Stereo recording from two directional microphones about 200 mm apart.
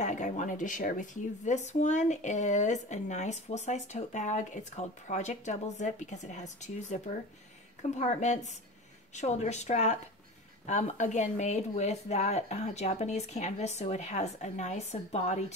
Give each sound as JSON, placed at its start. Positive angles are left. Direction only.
{"t": 0.0, "sound": "speech", "side_deg": 35}
{"t": 8.0, "sound": "speech", "side_deg": 35}